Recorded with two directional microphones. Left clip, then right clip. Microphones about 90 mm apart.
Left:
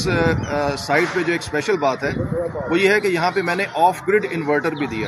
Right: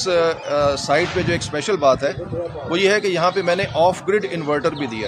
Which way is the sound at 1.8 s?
55° right (ahead or behind).